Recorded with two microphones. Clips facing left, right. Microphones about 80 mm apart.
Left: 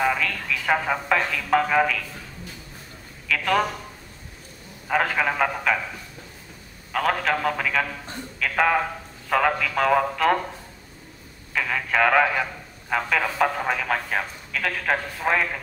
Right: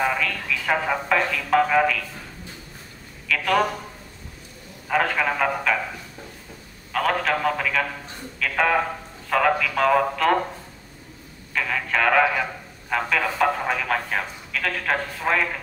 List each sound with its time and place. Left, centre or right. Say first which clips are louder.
0.0 s a man's voice: even; centre
3.3 s a man's voice: right 1 dB; centre
4.8 s a man's voice: even; centre
6.9 s a man's voice: right 1 dB; centre
11.5 s a man's voice: left 1 dB; centre